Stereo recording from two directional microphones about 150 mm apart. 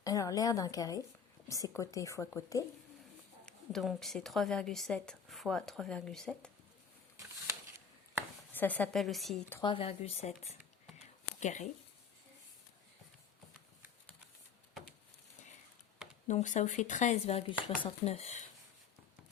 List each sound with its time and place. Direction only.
0.0 s a woman's voice: 25° left (ahead or behind)
3.4 s a woman's voice: centre (ahead or behind)
8.5 s a woman's voice: 10° left (ahead or behind)
9.6 s a sound: 40° left (ahead or behind)
16.2 s speech: 55° left (ahead or behind)